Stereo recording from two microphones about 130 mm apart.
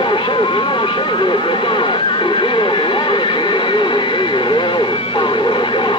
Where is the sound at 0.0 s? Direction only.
40° left (ahead or behind).